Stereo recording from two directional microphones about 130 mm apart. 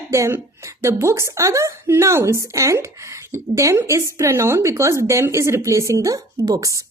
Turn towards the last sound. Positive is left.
turn(degrees=-25)  # may be behind; listen again after turning